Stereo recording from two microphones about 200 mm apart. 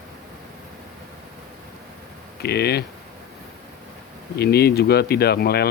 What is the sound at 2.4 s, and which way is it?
Speech, 55° left (ahead or behind).